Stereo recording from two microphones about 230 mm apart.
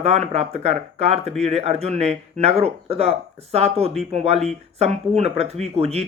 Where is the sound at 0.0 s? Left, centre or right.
Right.